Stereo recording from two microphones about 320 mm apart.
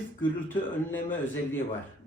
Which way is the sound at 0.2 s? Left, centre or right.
Centre.